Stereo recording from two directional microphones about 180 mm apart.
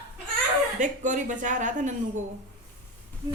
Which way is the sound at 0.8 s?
45° right (ahead or behind).